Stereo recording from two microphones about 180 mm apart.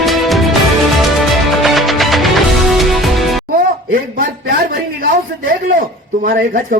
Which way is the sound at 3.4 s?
55° right (ahead or behind).